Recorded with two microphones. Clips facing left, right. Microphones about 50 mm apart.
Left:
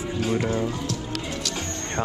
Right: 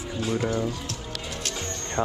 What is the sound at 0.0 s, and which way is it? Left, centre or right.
Speech, left.